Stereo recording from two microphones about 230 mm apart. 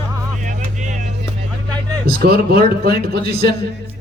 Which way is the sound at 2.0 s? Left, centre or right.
Right.